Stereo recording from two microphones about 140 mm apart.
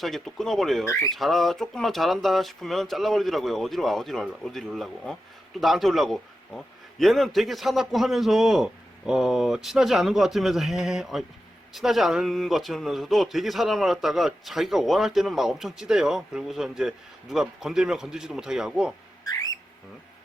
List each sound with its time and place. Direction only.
0.0 s a man's voice: centre (ahead or behind)
0.9 s speech: 20° left (ahead or behind)
1.1 s a man's voice: centre (ahead or behind)
19.2 s music: 25° left (ahead or behind)